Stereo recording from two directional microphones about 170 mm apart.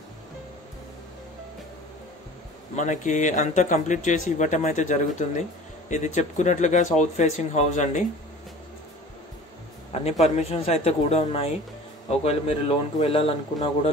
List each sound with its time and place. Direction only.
2.7 s a man's voice: 45° left (ahead or behind)
10.2 s a man's voice: 35° left (ahead or behind)